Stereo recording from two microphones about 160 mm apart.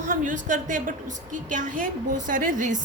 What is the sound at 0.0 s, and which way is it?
A woman's voice, 55° right (ahead or behind).